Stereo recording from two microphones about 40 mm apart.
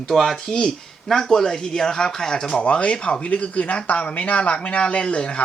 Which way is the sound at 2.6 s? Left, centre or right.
Left.